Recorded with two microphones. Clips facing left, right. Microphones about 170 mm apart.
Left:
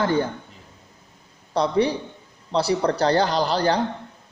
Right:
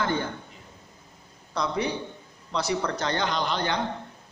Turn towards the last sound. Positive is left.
turn(degrees=35)  # may be behind; listen again after turning